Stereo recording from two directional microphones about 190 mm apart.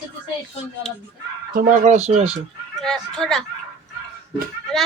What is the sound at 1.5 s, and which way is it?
Speech, 40° right (ahead or behind).